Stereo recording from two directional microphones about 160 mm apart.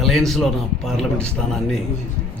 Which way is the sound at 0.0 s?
Centre (ahead or behind).